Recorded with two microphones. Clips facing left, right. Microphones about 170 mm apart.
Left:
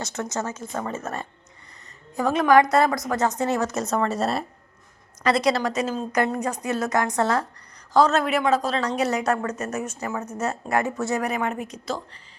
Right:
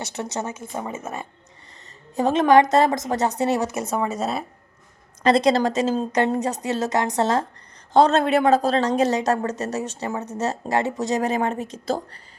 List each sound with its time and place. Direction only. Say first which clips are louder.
0.0 s a woman's voice: even; 15° right (ahead or behind)
2.1 s a woman's voice: right 2 dB; 25° right (ahead or behind); by 4.4 s centre (ahead or behind)
5.2 s a woman's voice: right 4 dB; 25° right (ahead or behind)
11.0 s a woman's voice: right 3 dB; 25° right (ahead or behind)